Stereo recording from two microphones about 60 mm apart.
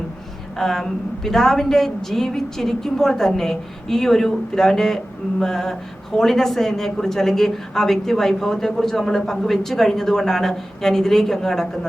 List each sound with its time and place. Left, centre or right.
0.6 s a woman's voice: centre